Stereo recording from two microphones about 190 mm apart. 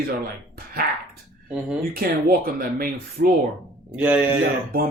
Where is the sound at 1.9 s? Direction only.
50° right (ahead or behind).